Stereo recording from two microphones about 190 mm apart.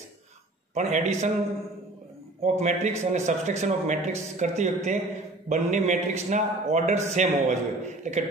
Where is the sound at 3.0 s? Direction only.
40° right (ahead or behind).